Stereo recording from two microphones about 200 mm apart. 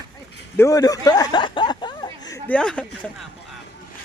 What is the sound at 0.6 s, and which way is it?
Speech, 15° left (ahead or behind).